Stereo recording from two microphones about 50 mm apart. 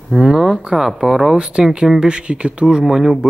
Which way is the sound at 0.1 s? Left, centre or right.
Centre.